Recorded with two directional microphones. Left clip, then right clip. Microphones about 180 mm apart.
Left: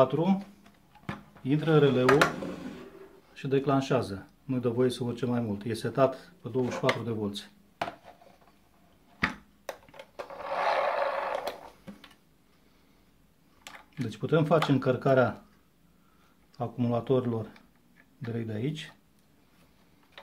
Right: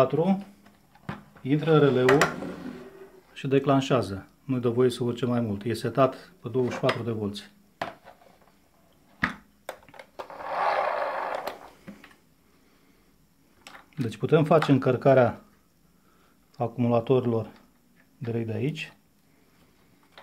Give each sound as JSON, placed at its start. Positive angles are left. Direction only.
{"t": 0.0, "sound": "speech", "side_deg": -10}
{"t": 1.4, "sound": "speech", "side_deg": -15}
{"t": 3.3, "sound": "speech", "side_deg": -30}
{"t": 9.9, "sound": "sewing machine", "side_deg": -10}
{"t": 14.0, "sound": "speech", "side_deg": -30}
{"t": 16.5, "sound": "speech", "side_deg": -20}